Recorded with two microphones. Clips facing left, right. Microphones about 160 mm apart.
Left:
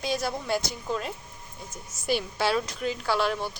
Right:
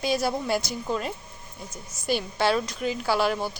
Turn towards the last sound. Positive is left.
turn(degrees=-5)  # may be behind; listen again after turning